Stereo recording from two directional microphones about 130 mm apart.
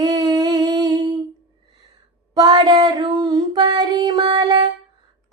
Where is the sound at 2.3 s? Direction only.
35° right (ahead or behind).